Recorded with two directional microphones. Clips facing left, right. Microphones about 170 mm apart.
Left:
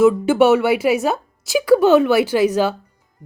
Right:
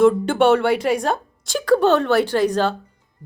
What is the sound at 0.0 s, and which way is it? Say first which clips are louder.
A woman's voice: left 2 dB; 5° left (ahead or behind).